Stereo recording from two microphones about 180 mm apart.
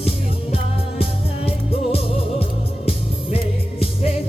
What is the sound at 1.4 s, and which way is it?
Music, 30° left (ahead or behind).